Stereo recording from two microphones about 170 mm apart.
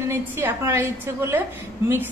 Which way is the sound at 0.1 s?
15° right (ahead or behind).